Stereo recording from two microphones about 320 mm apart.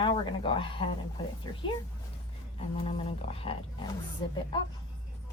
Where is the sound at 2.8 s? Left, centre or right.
Centre.